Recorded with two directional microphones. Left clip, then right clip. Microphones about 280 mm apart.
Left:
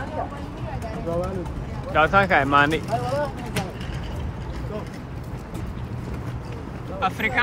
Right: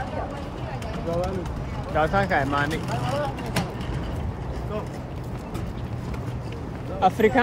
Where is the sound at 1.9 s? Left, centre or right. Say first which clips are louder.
Left 4 dB; centre.